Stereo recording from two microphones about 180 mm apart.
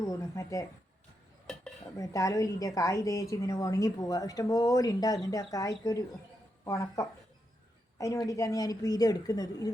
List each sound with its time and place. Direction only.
0.0 s speech: 15° left (ahead or behind)
1.5 s dishes: 5° left (ahead or behind)
2.0 s a woman's voice: 20° left (ahead or behind)